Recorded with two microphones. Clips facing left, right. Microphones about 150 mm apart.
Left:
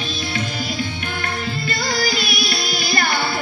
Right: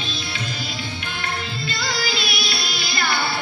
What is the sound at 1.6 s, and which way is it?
Music, 50° left (ahead or behind).